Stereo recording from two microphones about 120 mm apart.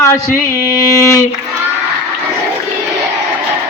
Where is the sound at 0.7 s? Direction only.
25° left (ahead or behind).